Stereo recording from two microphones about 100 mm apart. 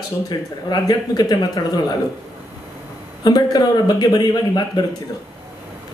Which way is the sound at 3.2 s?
40° left (ahead or behind).